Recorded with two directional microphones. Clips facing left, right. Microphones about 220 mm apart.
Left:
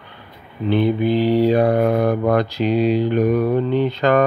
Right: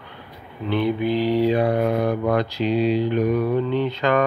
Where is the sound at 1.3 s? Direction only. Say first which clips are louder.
Left 4 dB; 45° left (ahead or behind).